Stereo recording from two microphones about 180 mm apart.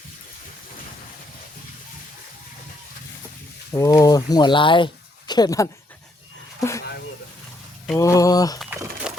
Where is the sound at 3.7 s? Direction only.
15° left (ahead or behind).